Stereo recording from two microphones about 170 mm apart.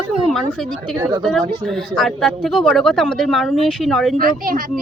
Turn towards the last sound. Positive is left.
turn(degrees=-55)  # may be behind; listen again after turning